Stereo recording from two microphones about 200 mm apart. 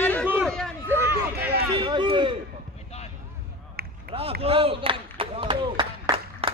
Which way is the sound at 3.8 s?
50° right (ahead or behind).